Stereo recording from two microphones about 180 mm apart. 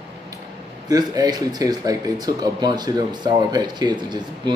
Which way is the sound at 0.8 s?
20° right (ahead or behind).